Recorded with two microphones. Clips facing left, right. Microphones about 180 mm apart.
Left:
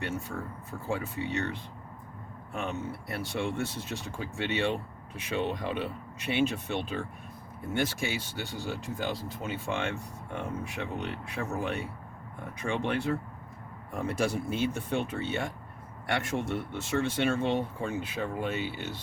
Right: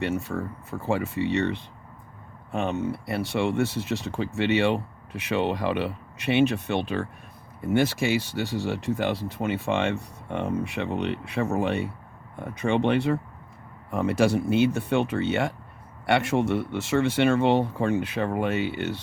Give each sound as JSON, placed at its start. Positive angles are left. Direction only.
{"t": 0.0, "sound": "speech", "side_deg": -75}
{"t": 2.5, "sound": "speech", "side_deg": -90}